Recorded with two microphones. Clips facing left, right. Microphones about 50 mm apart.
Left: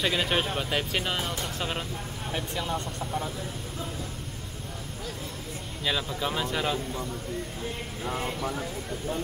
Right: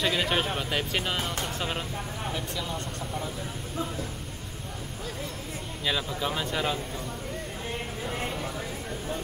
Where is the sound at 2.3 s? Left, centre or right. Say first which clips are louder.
Left 6 dB; left.